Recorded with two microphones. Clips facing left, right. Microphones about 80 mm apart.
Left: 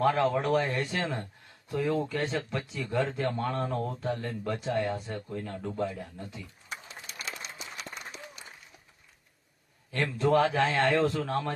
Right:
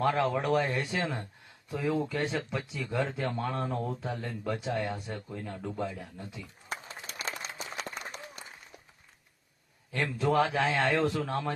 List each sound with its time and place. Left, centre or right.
0.0 s speech: centre
7.1 s a sound: right
9.9 s speech: centre